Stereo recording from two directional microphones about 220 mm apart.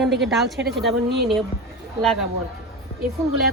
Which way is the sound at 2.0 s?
Centre (ahead or behind).